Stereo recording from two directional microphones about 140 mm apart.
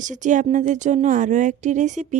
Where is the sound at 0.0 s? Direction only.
65° right (ahead or behind).